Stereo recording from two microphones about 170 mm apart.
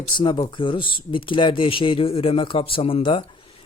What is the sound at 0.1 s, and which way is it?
A man's voice, 30° left (ahead or behind).